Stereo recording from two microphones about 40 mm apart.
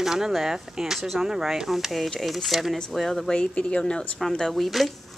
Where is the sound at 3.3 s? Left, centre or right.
Left.